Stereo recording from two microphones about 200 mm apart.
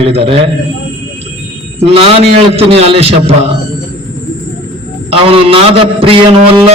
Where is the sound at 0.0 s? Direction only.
30° right (ahead or behind).